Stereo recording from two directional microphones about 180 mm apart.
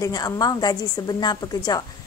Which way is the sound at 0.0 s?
20° left (ahead or behind).